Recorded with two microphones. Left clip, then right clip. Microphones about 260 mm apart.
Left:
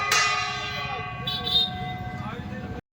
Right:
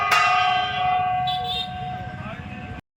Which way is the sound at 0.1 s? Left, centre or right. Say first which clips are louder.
Right 6 dB; right.